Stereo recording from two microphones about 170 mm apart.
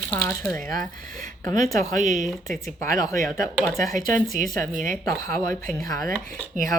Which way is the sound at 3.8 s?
50° right (ahead or behind).